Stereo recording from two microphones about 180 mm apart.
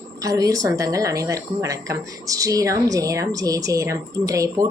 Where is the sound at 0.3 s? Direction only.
20° right (ahead or behind).